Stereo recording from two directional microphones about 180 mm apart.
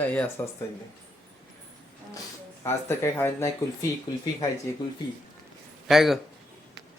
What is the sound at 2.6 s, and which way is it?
Speech, 15° left (ahead or behind).